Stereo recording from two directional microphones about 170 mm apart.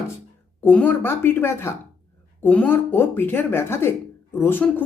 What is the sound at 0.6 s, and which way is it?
Speech, 10° left (ahead or behind).